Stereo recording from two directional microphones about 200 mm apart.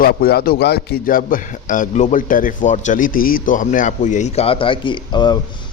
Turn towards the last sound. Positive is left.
turn(degrees=20)  # may be behind; listen again after turning